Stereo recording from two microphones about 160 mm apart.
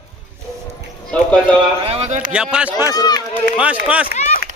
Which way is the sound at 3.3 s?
10° right (ahead or behind).